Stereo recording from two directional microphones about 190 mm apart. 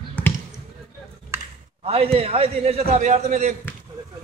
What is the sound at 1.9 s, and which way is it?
Speech, 30° right (ahead or behind).